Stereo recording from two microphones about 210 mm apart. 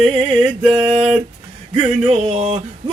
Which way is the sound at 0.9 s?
30° right (ahead or behind).